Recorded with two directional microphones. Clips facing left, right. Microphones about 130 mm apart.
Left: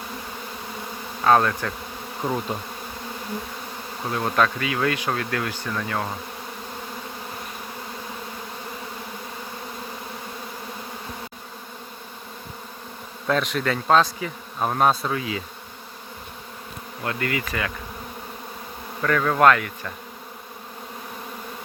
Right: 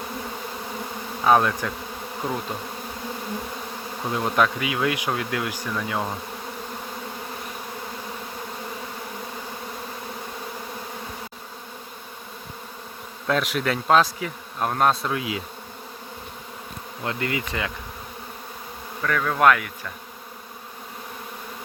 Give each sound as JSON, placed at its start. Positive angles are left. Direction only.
{"t": 1.2, "sound": "speech", "side_deg": -10}
{"t": 2.5, "sound": "bee", "side_deg": 5}
{"t": 4.1, "sound": "speech", "side_deg": -10}
{"t": 13.2, "sound": "bee", "side_deg": 0}
{"t": 17.0, "sound": "bee", "side_deg": -20}
{"t": 19.0, "sound": "bee", "side_deg": 0}
{"t": 19.4, "sound": "speech", "side_deg": -5}